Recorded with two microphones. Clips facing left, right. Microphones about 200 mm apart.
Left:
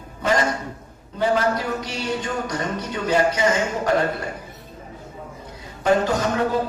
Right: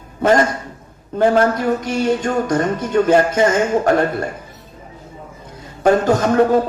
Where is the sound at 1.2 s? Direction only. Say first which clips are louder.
Right 6 dB; 50° right (ahead or behind).